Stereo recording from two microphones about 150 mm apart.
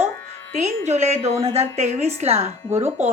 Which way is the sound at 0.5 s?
50° right (ahead or behind).